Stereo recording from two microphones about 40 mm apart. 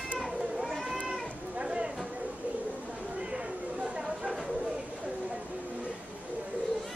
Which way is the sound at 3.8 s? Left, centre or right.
Centre.